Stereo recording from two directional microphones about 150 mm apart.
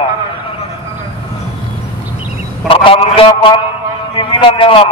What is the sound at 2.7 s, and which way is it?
A man's voice, 35° left (ahead or behind).